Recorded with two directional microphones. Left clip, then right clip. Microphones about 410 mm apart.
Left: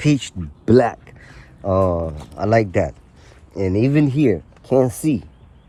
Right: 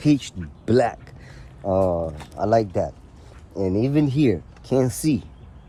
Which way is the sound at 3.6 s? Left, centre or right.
Left.